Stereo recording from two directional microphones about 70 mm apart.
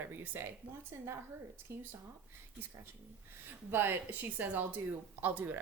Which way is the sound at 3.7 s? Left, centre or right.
Right.